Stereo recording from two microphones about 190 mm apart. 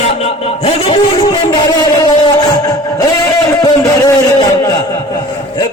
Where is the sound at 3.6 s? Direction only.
20° left (ahead or behind).